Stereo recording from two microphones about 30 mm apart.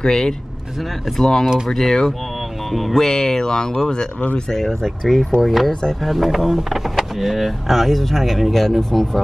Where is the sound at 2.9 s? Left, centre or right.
Centre.